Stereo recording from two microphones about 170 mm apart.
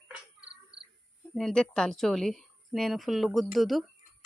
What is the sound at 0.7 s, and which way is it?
Cricket, 80° right.